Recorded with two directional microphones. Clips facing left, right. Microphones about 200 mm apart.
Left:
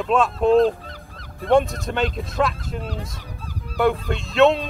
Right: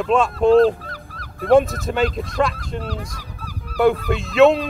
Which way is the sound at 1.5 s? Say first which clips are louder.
Right 3 dB; centre (ahead or behind).